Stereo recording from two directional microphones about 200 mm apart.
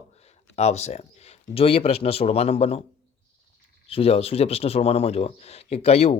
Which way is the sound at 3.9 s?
30° left (ahead or behind).